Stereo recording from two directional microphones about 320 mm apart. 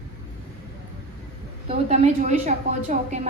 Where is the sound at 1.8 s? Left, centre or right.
Right.